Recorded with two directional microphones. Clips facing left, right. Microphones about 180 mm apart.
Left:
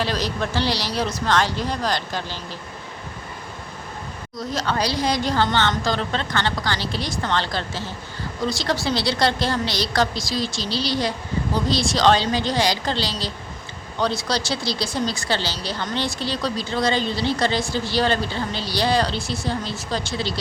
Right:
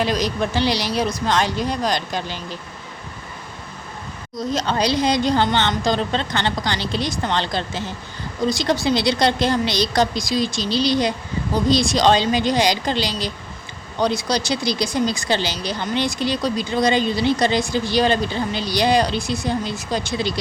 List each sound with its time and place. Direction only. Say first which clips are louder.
0.0 s speech: right 3 dB; 15° right (ahead or behind)
4.4 s a woman's voice: right 3 dB; 20° right (ahead or behind)